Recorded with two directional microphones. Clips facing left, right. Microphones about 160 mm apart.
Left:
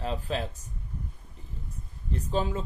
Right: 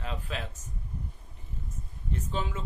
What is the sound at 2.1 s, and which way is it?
Speech, 35° left (ahead or behind).